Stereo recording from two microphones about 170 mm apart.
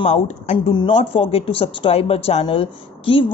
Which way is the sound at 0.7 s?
25° left (ahead or behind).